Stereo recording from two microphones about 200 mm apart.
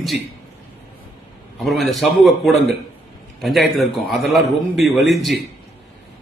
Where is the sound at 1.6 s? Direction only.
Centre (ahead or behind).